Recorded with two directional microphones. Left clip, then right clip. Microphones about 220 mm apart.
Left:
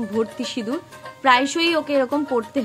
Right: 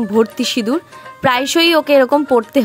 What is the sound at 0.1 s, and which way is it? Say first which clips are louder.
A woman's voice: right 10 dB; 40° right (ahead or behind).